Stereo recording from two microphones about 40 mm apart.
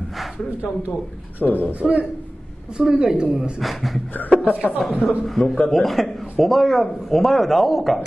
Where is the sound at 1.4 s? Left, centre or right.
Left.